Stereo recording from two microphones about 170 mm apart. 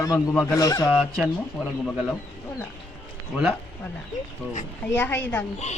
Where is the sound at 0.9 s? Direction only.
5° right (ahead or behind).